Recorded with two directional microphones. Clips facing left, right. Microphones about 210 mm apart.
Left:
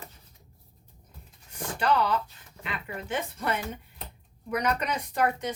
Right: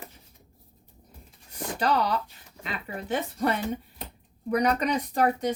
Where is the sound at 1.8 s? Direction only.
40° right (ahead or behind).